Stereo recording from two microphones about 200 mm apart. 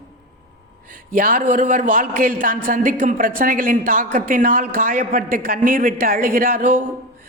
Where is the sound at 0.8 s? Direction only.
45° right (ahead or behind).